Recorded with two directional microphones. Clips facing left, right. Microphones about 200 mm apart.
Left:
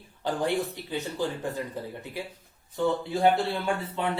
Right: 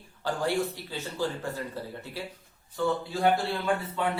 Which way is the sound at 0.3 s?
20° left (ahead or behind).